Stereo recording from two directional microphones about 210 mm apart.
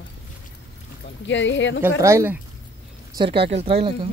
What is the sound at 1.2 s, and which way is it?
Speech, 60° left (ahead or behind).